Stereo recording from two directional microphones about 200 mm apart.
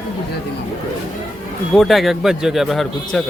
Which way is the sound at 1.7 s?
Centre (ahead or behind).